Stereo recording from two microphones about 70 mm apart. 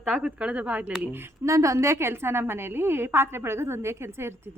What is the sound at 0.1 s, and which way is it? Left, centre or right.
Speech, centre.